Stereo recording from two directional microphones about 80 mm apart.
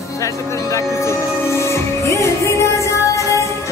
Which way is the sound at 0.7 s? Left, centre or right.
Left.